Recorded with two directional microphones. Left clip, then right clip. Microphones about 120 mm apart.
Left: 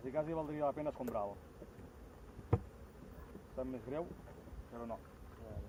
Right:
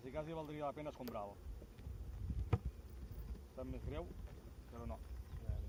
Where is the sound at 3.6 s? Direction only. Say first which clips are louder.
Left 7 dB; 20° right (ahead or behind).